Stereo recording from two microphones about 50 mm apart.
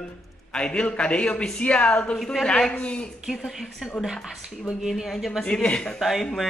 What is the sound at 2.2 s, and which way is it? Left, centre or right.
Speech, centre.